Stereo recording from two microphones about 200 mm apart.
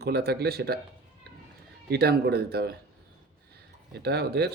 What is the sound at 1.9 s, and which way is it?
Speech, 55° right (ahead or behind).